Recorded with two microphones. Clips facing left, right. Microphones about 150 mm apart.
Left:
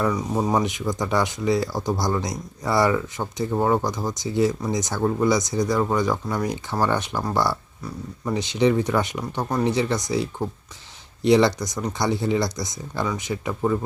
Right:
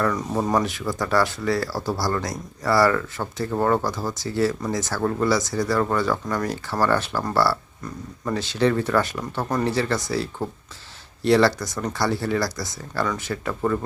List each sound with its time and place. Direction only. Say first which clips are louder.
0.0 s speech: even; 10° left (ahead or behind)